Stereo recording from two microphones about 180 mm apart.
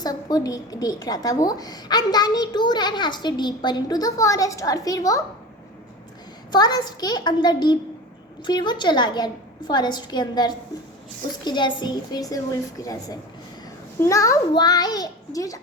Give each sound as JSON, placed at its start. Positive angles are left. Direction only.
{"t": 0.0, "sound": "a woman's voice", "side_deg": 20}
{"t": 6.5, "sound": "a woman's voice", "side_deg": 25}